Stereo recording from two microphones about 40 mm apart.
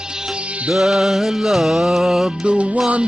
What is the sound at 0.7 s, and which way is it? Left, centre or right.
Music, centre.